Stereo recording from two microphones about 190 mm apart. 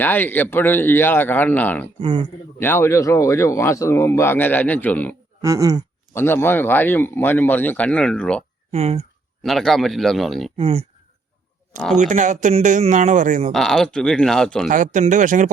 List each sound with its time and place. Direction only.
0.0 s speech: 10° left (ahead or behind)
2.0 s speech: 25° right (ahead or behind)
2.6 s speech: 10° left (ahead or behind)
5.4 s a sound: 15° right (ahead or behind)
6.1 s speech: 10° left (ahead or behind)
8.7 s speech: 35° right (ahead or behind)
9.4 s speech: centre (ahead or behind)
10.6 s speech: 30° right (ahead or behind)
11.9 s speech: 40° right (ahead or behind)
13.5 s speech: centre (ahead or behind)
14.7 s speech: 40° right (ahead or behind)